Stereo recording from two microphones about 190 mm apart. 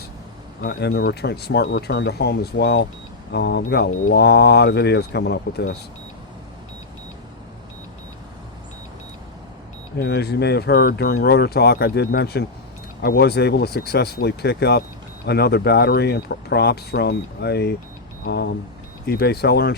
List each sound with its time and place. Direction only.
0.6 s speech: 60° left (ahead or behind)
10.0 s speech: 60° left (ahead or behind)